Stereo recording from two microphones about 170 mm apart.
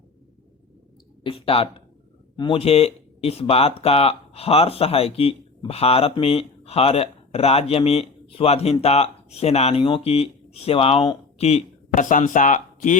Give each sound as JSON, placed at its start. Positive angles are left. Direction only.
{"t": 1.2, "sound": "speech", "side_deg": 30}